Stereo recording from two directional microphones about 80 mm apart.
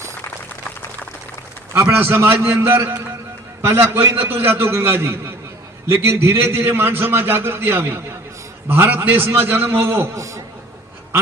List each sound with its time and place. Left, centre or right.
1.7 s a man's voice: right